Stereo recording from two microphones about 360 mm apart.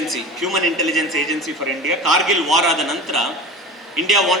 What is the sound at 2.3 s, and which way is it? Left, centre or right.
A man's voice, centre.